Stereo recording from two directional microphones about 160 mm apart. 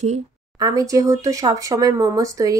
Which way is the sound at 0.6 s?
20° right (ahead or behind).